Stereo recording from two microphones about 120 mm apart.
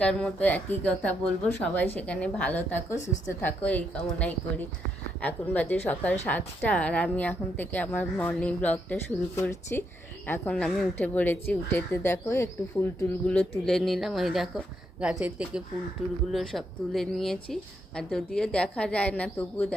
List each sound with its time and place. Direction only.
0.0 s a woman's voice: 5° left (ahead or behind)
13.2 s a woman's voice: 5° left (ahead or behind)